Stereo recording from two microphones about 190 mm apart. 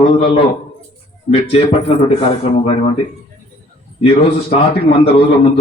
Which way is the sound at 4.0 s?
30° left (ahead or behind).